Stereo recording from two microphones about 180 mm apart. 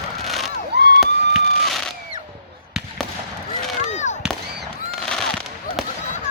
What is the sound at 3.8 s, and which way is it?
Fireworks, 40° left (ahead or behind).